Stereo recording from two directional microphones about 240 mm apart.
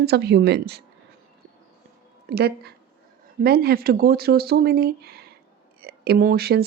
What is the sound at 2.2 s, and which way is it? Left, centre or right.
A woman's voice, right.